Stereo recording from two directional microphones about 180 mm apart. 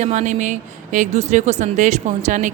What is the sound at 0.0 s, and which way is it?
Speech, 40° right (ahead or behind).